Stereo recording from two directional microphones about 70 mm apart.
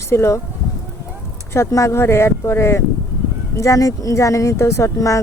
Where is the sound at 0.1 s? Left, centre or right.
Left.